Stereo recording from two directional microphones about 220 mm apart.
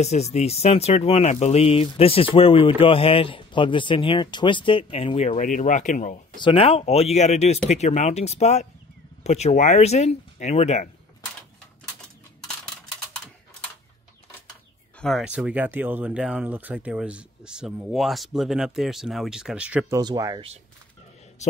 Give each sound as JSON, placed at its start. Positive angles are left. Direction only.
{"t": 0.0, "sound": "speech", "side_deg": 30}
{"t": 6.3, "sound": "speech", "side_deg": 25}
{"t": 15.0, "sound": "speech", "side_deg": 0}
{"t": 20.0, "sound": "speech", "side_deg": -20}
{"t": 21.4, "sound": "a sound", "side_deg": 30}